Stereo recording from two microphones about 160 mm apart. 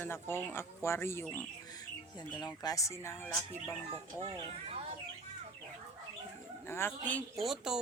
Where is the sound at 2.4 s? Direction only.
25° left (ahead or behind).